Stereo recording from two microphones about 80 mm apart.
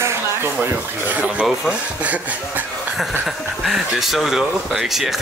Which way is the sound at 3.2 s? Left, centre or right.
Centre.